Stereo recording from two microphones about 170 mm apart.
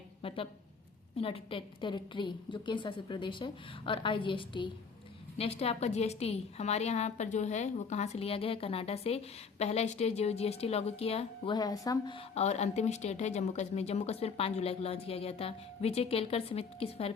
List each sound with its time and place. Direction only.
0.2 s a woman's voice: 30° left (ahead or behind)
11.5 s a woman's voice: 20° left (ahead or behind)